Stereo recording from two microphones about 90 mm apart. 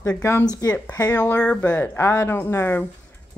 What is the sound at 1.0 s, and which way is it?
Speech, 15° left (ahead or behind).